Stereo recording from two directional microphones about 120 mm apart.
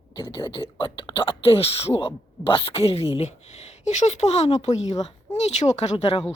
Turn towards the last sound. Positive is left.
turn(degrees=50)  # may be behind; listen again after turning